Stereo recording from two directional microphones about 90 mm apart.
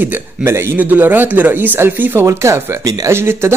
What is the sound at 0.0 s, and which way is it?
Speech, 20° right (ahead or behind).